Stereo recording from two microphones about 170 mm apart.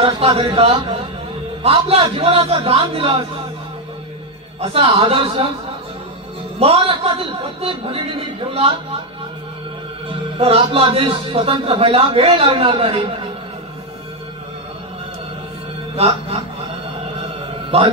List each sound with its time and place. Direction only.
0.0 s a man's voice: 35° right (ahead or behind)
4.6 s a man's voice: 35° right (ahead or behind)
6.6 s a man's voice: 35° right (ahead or behind)
10.3 s a man's voice: 35° right (ahead or behind)
16.0 s a man's voice: 35° right (ahead or behind)
17.7 s a man's voice: 35° right (ahead or behind)